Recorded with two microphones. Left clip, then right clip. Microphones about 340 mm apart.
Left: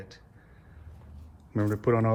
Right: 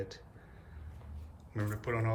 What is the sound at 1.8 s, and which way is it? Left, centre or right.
Speech, centre.